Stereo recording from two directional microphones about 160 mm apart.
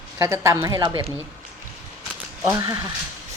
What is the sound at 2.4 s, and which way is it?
Speech, 20° right (ahead or behind).